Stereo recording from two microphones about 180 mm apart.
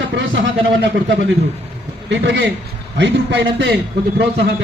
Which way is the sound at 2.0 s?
80° right.